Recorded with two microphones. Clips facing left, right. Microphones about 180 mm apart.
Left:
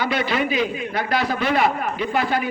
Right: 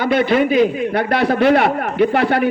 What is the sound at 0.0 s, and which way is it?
A man's voice, 55° right (ahead or behind).